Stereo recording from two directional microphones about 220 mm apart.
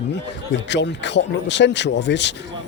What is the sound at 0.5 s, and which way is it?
Speech, 55° left (ahead or behind).